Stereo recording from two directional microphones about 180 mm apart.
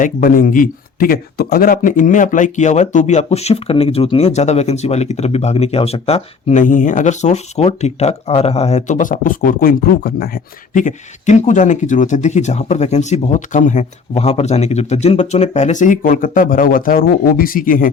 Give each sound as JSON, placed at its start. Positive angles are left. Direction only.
{"t": 0.0, "sound": "speech", "side_deg": 50}